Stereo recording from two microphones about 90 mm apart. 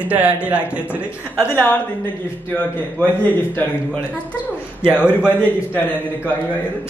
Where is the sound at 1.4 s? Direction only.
20° left (ahead or behind).